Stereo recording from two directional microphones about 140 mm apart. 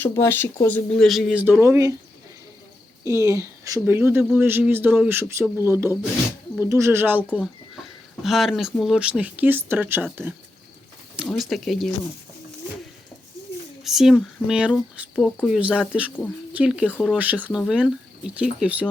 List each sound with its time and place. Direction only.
0.0 s speech: 20° left (ahead or behind); by 1.6 s 10° right (ahead or behind)
1.6 s speech: 20° right (ahead or behind)
3.0 s speech: 20° right (ahead or behind)
7.8 s a sound: centre (ahead or behind)
8.8 s speech: 5° right (ahead or behind)
11.3 s speech: centre (ahead or behind)
13.8 s speech: centre (ahead or behind)